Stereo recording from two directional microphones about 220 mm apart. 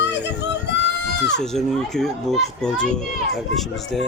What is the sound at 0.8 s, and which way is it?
Goat, 50° left (ahead or behind).